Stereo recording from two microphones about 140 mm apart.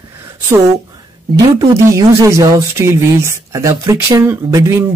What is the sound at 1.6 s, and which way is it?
A woman's voice, 20° right (ahead or behind).